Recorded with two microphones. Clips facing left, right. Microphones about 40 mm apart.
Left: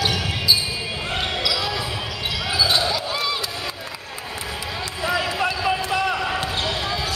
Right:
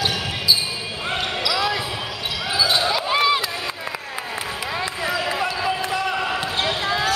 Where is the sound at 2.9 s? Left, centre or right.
Right.